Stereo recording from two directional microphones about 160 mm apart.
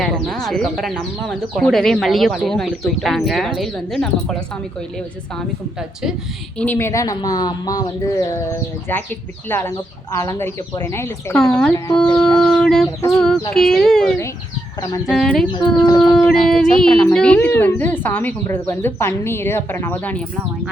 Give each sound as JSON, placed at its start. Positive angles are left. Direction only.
{"t": 0.0, "sound": "speech", "side_deg": 5}
{"t": 6.6, "sound": "speech", "side_deg": 15}
{"t": 8.9, "sound": "speech", "side_deg": 10}
{"t": 11.3, "sound": "speech", "side_deg": 5}
{"t": 12.2, "sound": "chicken", "side_deg": 5}
{"t": 13.1, "sound": "speech", "side_deg": 5}
{"t": 14.8, "sound": "speech", "side_deg": 20}
{"t": 15.1, "sound": "speech", "side_deg": 5}